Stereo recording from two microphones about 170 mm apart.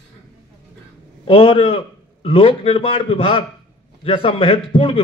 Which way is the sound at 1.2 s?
35° left (ahead or behind).